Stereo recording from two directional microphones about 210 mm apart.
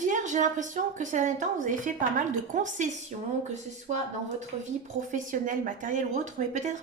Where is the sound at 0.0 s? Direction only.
35° right (ahead or behind).